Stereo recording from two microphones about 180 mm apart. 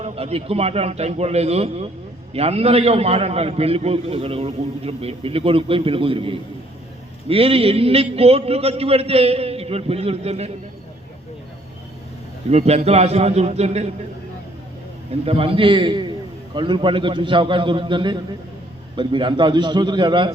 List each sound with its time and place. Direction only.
0.0 s a man's voice: 35° right (ahead or behind)
12.5 s a man's voice: 35° right (ahead or behind)
15.1 s a man's voice: 30° right (ahead or behind)